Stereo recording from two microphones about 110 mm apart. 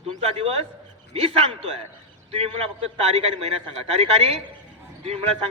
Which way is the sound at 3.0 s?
65° right (ahead or behind).